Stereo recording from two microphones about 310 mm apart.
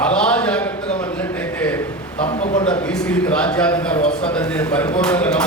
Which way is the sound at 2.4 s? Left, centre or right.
Left.